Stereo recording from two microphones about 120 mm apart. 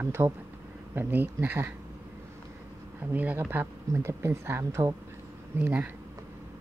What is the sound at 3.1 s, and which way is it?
A woman's voice, 15° right (ahead or behind).